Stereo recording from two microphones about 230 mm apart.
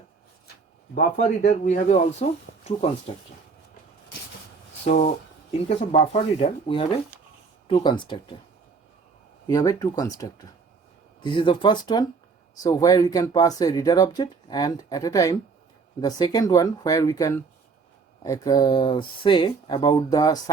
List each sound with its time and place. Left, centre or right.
0.9 s speech: left
4.9 s speech: left
9.5 s speech: centre